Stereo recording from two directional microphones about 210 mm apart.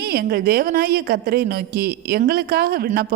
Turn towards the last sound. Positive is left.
turn(degrees=-45)  # may be behind; listen again after turning